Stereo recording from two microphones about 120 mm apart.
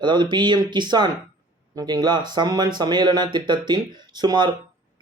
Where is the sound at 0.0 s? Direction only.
40° right (ahead or behind).